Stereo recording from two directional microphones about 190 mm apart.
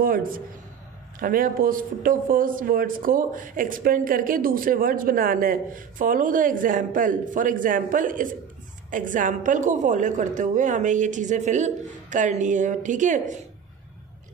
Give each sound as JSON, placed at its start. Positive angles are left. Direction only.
{"t": 0.0, "sound": "a woman's voice", "side_deg": -45}